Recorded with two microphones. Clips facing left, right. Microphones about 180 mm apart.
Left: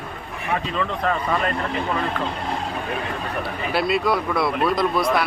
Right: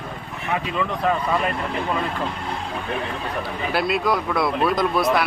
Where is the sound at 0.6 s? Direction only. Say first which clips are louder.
Right 1 dB; 15° right (ahead or behind).